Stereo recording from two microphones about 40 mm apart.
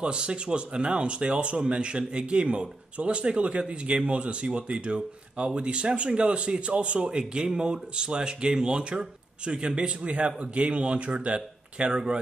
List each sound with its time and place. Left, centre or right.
0.0 s speech: right